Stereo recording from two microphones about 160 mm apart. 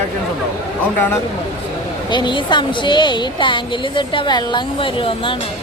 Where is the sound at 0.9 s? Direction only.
10° left (ahead or behind).